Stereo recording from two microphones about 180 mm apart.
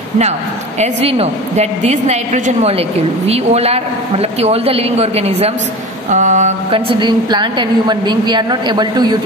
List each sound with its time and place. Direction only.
0.7 s a man's voice: 35° right (ahead or behind)